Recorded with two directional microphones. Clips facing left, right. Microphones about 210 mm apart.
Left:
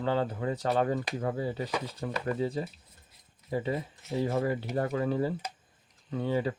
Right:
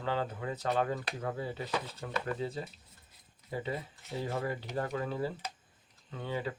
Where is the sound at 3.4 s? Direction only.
40° left (ahead or behind).